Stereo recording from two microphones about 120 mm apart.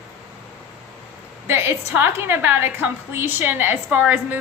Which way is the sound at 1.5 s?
20° right (ahead or behind).